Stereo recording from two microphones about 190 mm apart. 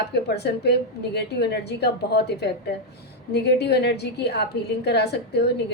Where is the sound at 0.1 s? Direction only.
60° left (ahead or behind).